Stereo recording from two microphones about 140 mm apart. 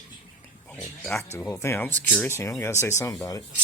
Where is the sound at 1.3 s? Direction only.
15° left (ahead or behind).